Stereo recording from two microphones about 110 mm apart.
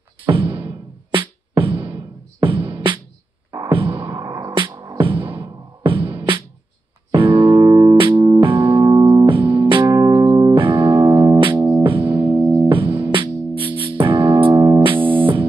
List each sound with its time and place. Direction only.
0.3 s music: 50° right (ahead or behind)
4.2 s music: 35° right (ahead or behind); by 7.5 s 50° right (ahead or behind)
7.5 s music: 35° right (ahead or behind)
8.8 s keyboard: 35° right (ahead or behind)
9.9 s music: 35° right (ahead or behind); by 15.4 s 50° right (ahead or behind)